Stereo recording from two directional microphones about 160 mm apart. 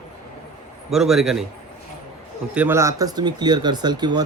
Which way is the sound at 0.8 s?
Centre (ahead or behind).